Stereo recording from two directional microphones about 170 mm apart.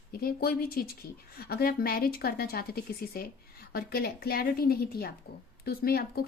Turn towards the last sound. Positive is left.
turn(degrees=65)  # may be behind; listen again after turning